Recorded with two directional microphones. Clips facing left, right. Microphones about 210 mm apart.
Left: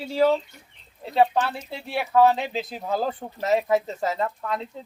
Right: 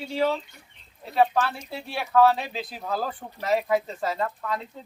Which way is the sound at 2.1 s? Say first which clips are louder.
Left 1 dB; 20° left (ahead or behind).